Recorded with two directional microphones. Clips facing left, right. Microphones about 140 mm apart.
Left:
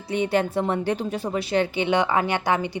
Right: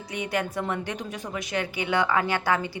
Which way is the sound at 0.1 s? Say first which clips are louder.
Left 7 dB; 30° left (ahead or behind).